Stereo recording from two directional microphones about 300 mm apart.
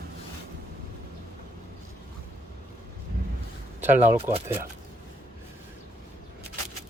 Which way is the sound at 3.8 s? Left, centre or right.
Centre.